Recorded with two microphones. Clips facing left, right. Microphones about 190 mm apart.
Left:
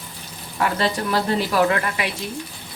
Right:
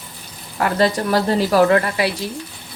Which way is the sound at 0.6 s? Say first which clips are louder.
Right 4 dB; 40° right (ahead or behind).